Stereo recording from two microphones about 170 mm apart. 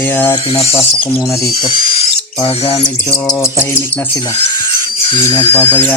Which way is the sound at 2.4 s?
35° left (ahead or behind).